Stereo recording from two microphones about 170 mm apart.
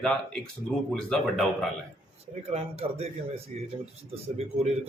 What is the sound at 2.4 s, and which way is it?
A man's voice, 35° right (ahead or behind).